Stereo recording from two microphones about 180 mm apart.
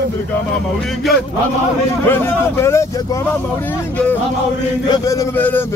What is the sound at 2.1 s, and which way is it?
Speech, 15° left (ahead or behind).